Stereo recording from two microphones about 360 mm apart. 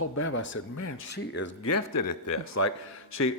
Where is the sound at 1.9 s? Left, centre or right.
Left.